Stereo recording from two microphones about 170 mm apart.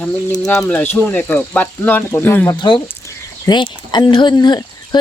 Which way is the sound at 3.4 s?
25° left (ahead or behind).